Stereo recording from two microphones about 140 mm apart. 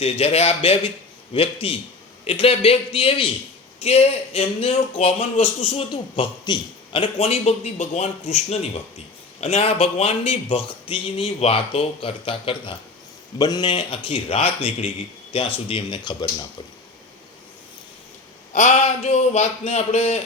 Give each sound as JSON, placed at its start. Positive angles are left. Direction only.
{"t": 0.0, "sound": "a man's voice", "side_deg": 45}
{"t": 5.9, "sound": "a man's voice", "side_deg": 35}
{"t": 18.5, "sound": "a man's voice", "side_deg": 55}